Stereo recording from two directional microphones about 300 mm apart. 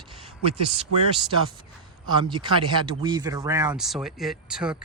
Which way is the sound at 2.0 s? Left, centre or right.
Centre.